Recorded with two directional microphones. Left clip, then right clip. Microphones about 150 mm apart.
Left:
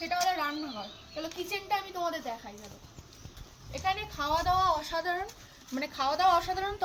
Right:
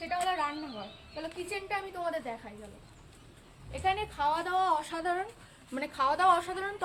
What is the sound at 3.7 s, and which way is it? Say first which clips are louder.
Speech: right 1 dB; 5° right (ahead or behind).